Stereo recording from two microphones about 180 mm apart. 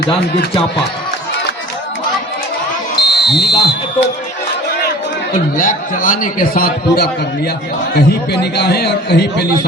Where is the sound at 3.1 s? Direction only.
70° left (ahead or behind).